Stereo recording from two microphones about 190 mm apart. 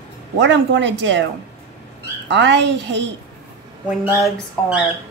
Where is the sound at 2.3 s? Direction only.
70° right (ahead or behind).